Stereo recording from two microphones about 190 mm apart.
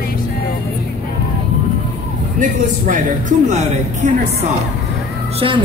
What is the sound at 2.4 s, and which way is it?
Speech, 40° right (ahead or behind).